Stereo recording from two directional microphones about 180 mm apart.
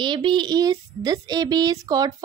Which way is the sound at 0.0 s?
25° right (ahead or behind).